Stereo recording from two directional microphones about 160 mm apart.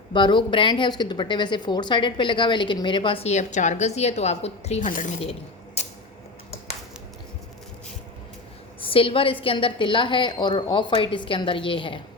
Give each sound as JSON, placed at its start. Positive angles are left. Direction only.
{"t": 0.1, "sound": "a woman's voice", "side_deg": 30}
{"t": 8.8, "sound": "a woman's voice", "side_deg": 35}